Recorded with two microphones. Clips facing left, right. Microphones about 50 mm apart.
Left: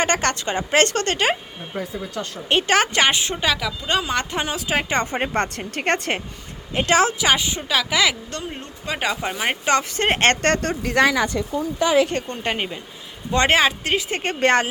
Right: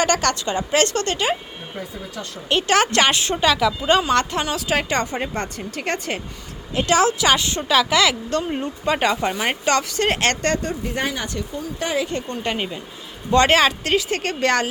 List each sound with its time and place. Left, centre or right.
0.0 s speech: left
2.5 s speech: left
2.9 s speech: centre
4.0 s speech: centre
4.9 s speech: left
7.2 s speech: centre
7.7 s speech: centre
9.0 s speech: centre
9.9 s speech: left
10.5 s a woman's voice: left
11.8 s speech: left
12.3 s speech: left
13.5 s speech: centre; by 14.7 s left